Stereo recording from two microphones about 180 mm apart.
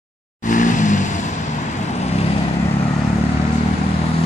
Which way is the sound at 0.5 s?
45° left (ahead or behind).